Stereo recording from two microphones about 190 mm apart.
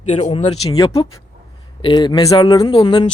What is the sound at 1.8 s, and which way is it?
Speech, 25° left (ahead or behind).